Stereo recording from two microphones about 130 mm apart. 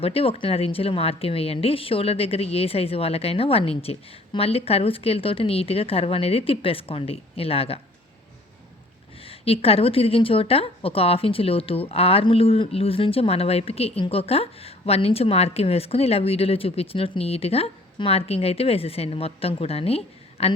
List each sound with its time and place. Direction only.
0.0 s a woman's voice: 50° left (ahead or behind)
9.2 s a woman's voice: 50° left (ahead or behind)